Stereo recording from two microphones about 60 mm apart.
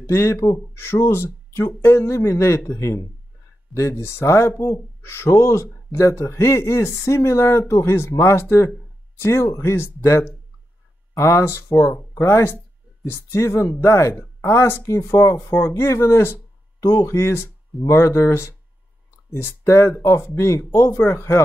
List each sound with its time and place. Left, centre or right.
0.1 s speech: left
0.7 s speech: left
5.3 s speech: left
9.9 s speech: left
15.3 s speech: left
15.7 s speech: left
16.8 s speech: left
21.0 s speech: left